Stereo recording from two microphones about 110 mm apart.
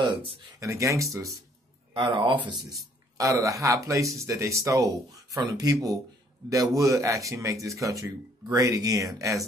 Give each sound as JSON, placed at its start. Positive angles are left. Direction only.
{"t": 0.6, "sound": "speech", "side_deg": -30}
{"t": 2.0, "sound": "speech", "side_deg": -50}
{"t": 3.2, "sound": "speech", "side_deg": -30}